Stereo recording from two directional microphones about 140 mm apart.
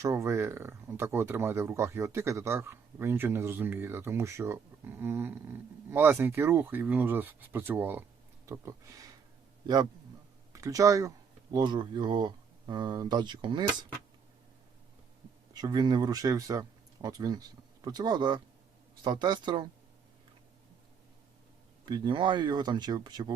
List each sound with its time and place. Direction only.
0.0 s speech: 20° right (ahead or behind)
10.5 s speech: 25° right (ahead or behind)
15.5 s speech: 30° right (ahead or behind)
21.8 s speech: 30° right (ahead or behind)